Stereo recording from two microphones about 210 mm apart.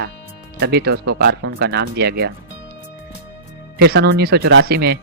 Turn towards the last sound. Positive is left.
turn(degrees=-50)  # may be behind; listen again after turning